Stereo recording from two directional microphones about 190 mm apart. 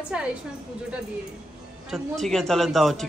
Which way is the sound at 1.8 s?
Centre (ahead or behind).